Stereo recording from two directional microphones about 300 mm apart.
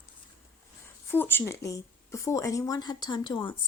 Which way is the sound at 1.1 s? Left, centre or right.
Centre.